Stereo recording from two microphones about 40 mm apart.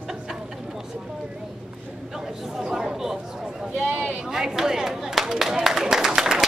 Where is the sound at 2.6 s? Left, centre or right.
Centre.